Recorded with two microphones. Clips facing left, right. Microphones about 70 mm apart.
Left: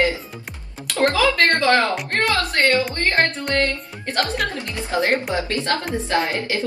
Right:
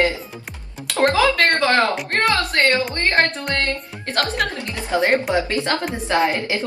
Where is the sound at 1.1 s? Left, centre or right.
Right.